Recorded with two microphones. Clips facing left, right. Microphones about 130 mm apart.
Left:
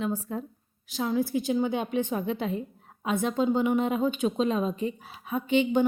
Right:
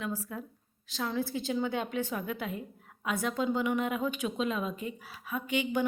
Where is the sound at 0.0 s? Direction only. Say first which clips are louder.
Left 6 dB; 25° left (ahead or behind).